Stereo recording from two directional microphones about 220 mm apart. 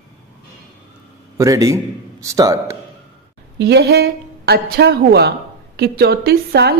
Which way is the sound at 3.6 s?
50° right (ahead or behind).